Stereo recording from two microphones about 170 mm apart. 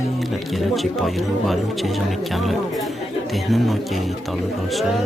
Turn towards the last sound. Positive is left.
turn(degrees=0)  # may be behind; listen again after turning